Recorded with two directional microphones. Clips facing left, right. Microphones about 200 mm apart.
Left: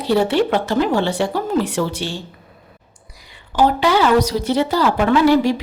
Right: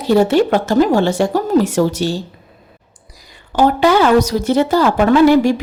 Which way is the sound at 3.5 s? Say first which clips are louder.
Right 3 dB; 50° right (ahead or behind).